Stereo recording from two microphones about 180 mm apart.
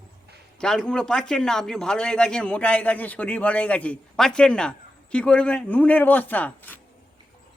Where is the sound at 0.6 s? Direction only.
5° left (ahead or behind).